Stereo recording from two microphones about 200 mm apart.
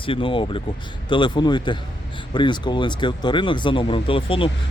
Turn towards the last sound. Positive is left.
turn(degrees=25)  # may be behind; listen again after turning